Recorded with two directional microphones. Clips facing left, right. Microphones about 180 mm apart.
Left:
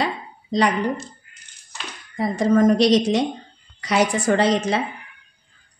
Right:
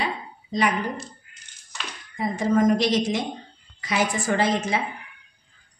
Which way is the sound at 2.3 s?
70° left (ahead or behind).